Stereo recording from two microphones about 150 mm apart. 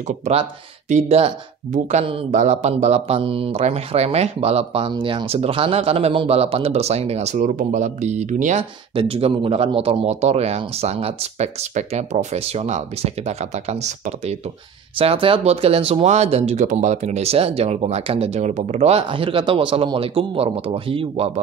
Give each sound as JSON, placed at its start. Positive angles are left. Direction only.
{"t": 0.0, "sound": "speech", "side_deg": -55}
{"t": 8.9, "sound": "speech", "side_deg": -40}
{"t": 15.0, "sound": "speech", "side_deg": -35}